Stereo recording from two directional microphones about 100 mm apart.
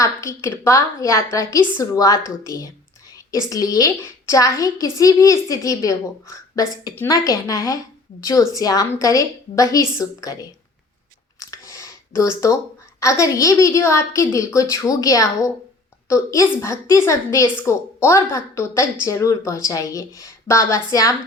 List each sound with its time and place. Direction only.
0.0 s a woman's voice: 30° left (ahead or behind)
11.3 s a sound: 35° left (ahead or behind)
13.0 s a woman's voice: 30° left (ahead or behind)